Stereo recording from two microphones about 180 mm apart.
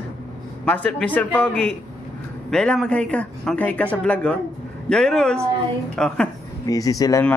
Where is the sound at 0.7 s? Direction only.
5° left (ahead or behind).